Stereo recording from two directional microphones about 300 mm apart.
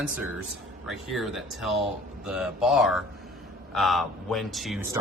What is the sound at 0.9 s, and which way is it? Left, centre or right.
Speech, centre.